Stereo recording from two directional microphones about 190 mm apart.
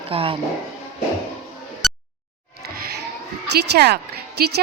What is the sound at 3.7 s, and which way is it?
Speech, 55° right (ahead or behind).